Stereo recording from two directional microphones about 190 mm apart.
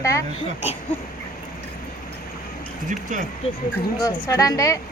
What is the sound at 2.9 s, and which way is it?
Speech, 40° right (ahead or behind).